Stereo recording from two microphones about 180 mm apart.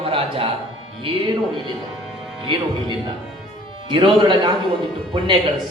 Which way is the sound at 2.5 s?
25° right (ahead or behind).